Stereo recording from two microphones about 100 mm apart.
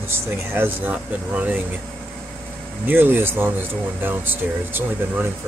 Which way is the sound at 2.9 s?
20° right (ahead or behind).